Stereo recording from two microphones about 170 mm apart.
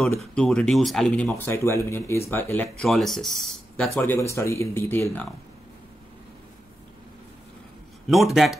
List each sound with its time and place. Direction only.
0.2 s speech: 5° left (ahead or behind)
1.3 s speech: 15° left (ahead or behind)
3.9 s speech: 15° left (ahead or behind)
8.1 s speech: centre (ahead or behind)